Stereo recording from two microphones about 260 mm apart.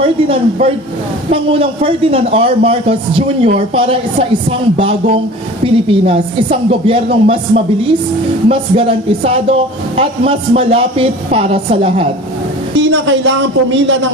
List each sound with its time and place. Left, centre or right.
0.0 s speech: right
12.7 s a man's voice: right